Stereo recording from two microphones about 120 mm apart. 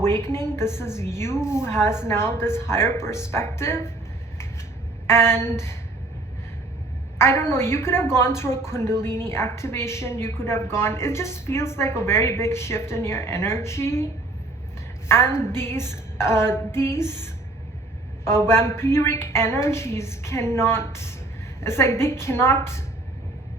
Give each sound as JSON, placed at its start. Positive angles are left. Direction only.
{"t": 0.0, "sound": "a woman's voice", "side_deg": 20}
{"t": 5.0, "sound": "a woman's voice", "side_deg": 20}
{"t": 7.2, "sound": "a woman's voice", "side_deg": 20}